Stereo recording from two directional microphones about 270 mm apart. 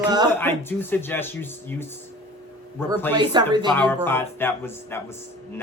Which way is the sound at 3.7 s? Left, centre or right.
Centre.